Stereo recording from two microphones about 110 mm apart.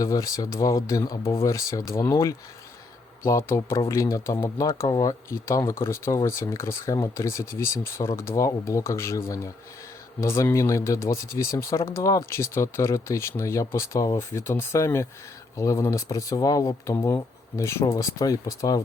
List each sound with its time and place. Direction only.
0.0 s speech: 30° left (ahead or behind)